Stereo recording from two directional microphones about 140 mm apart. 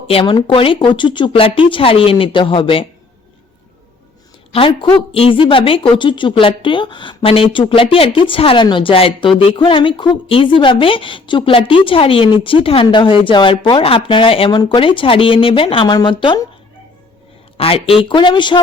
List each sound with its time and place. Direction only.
0.1 s a woman's voice: 40° left (ahead or behind)
4.5 s a woman's voice: 40° left (ahead or behind)
17.6 s a woman's voice: 45° left (ahead or behind)